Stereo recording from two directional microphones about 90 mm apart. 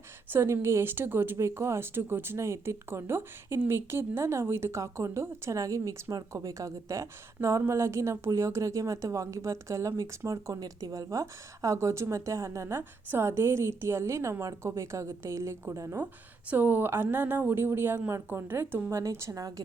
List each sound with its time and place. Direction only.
0.3 s a woman's voice: 30° right (ahead or behind)
16.5 s speech: 20° right (ahead or behind); by 19.6 s 40° right (ahead or behind)